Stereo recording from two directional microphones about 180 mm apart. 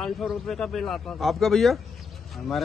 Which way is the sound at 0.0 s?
Centre (ahead or behind).